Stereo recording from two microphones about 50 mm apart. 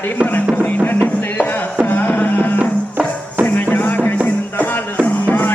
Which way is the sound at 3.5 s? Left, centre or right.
Left.